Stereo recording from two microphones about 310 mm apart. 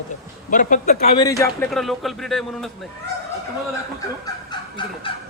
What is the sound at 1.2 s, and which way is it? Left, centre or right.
Speech, centre.